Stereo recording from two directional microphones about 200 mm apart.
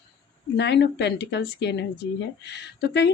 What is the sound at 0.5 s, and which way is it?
Speech, 55° left (ahead or behind).